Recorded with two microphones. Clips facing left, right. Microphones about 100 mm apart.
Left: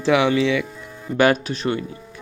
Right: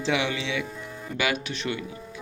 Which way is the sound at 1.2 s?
45° left (ahead or behind).